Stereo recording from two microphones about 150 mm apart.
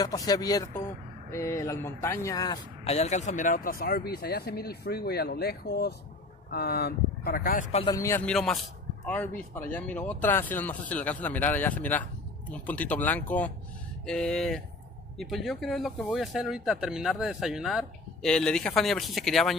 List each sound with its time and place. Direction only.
0.0 s speech: 25° left (ahead or behind)
2.8 s speech: 45° left (ahead or behind); by 7.6 s 75° left (ahead or behind)
7.9 s speech: 20° left (ahead or behind)
8.2 s a man's voice: 5° left (ahead or behind)